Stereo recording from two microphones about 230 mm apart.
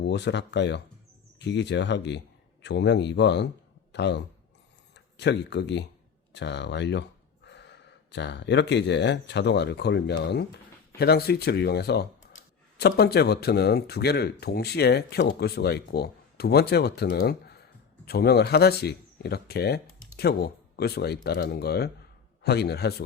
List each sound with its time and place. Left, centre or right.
0.0 s speech: left